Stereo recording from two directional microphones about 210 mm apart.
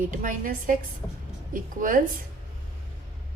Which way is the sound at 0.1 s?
40° right (ahead or behind).